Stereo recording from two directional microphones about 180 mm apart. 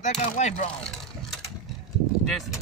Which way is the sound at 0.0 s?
40° left (ahead or behind).